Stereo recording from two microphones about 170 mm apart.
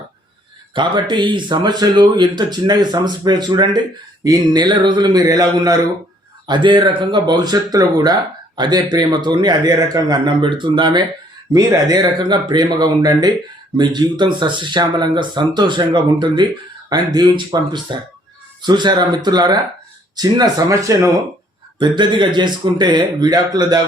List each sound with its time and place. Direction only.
0.7 s speech: 30° right (ahead or behind)